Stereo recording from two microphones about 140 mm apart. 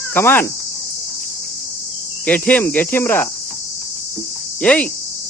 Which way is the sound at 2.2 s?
10° left (ahead or behind).